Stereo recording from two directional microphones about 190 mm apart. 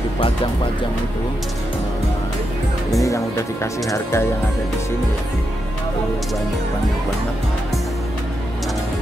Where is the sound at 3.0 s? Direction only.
15° left (ahead or behind).